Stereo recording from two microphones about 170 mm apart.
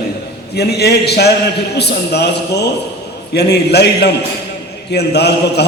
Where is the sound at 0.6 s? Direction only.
75° left (ahead or behind).